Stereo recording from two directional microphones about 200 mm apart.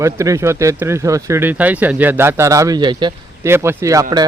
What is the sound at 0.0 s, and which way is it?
Speech, 15° right (ahead or behind).